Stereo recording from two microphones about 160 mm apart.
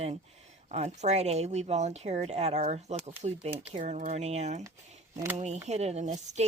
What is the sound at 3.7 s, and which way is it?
Speech, 55° right (ahead or behind).